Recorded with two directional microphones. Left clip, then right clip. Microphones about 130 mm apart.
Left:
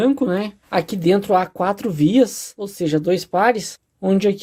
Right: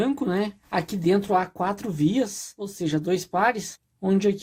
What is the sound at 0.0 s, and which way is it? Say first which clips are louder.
Speech: left 6 dB; 25° left (ahead or behind).